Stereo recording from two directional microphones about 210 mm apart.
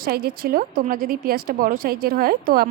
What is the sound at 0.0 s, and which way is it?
A woman's voice, 45° right (ahead or behind).